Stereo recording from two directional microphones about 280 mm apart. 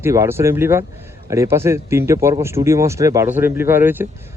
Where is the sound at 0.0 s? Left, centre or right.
Centre.